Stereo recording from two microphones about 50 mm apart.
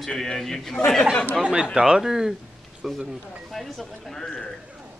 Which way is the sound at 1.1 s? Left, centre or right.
Left.